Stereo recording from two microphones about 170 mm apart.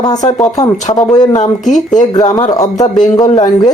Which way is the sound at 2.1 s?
20° left (ahead or behind).